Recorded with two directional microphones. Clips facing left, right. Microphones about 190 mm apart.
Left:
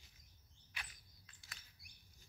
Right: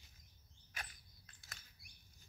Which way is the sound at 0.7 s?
45° right (ahead or behind).